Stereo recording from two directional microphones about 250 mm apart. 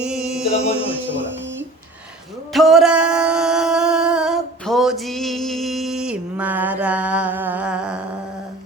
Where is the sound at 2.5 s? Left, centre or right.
Centre.